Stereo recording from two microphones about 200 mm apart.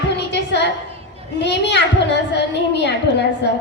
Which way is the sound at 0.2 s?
60° left (ahead or behind).